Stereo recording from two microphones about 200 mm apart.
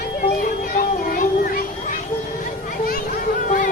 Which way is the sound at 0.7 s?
45° left (ahead or behind).